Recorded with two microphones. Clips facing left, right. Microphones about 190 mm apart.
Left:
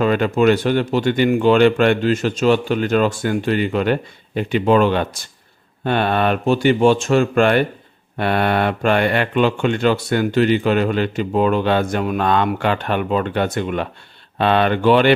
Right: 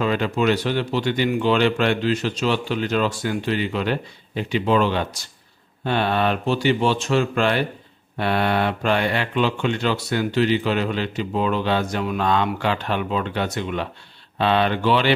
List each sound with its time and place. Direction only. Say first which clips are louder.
0.0 s speech: left 5 dB; 50° left (ahead or behind)